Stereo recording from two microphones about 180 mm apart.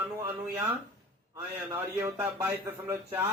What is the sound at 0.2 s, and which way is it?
A man's voice, 15° right (ahead or behind).